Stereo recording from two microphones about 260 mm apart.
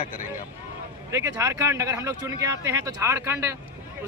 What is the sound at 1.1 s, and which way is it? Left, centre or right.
Speech, centre.